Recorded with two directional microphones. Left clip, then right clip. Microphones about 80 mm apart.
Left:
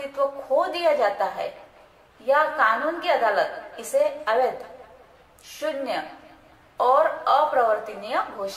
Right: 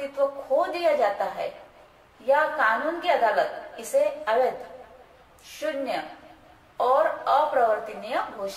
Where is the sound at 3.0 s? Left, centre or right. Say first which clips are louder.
Left 1 dB; left.